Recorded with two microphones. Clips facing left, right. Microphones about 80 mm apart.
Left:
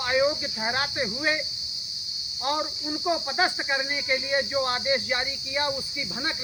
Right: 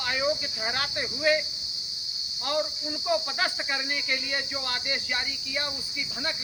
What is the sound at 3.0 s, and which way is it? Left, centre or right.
Speech, left.